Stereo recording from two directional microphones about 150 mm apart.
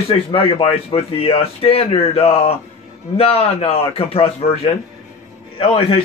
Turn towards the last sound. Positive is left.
turn(degrees=35)  # may be behind; listen again after turning